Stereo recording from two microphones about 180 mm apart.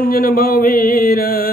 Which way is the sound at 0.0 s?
55° left (ahead or behind).